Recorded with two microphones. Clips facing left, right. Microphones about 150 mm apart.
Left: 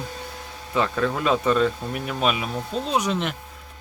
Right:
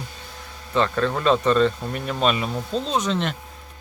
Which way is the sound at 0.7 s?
10° left (ahead or behind).